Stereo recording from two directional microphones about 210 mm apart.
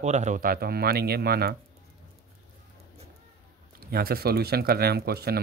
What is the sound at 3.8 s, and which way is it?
Speech, 45° right (ahead or behind).